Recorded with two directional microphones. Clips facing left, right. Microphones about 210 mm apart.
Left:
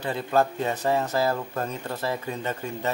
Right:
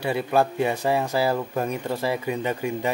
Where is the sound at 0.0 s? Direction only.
10° right (ahead or behind).